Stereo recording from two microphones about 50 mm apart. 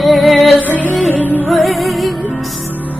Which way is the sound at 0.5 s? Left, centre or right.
Left.